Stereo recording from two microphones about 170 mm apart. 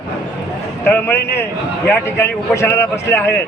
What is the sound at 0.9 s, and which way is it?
A man's voice, 15° left (ahead or behind).